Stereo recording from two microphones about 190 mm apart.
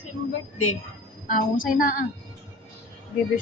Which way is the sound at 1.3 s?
45° left (ahead or behind).